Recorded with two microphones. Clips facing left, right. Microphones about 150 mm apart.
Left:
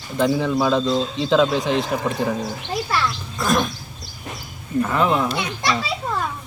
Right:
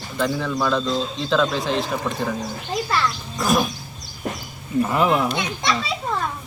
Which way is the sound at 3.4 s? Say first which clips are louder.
Even; 5° right (ahead or behind).